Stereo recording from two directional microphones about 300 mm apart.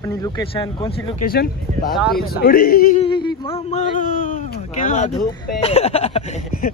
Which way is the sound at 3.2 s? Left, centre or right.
Centre.